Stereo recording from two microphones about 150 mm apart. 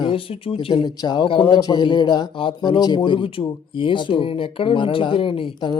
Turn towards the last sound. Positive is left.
turn(degrees=35)  # may be behind; listen again after turning